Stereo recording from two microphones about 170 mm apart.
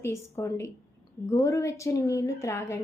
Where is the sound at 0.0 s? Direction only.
15° left (ahead or behind).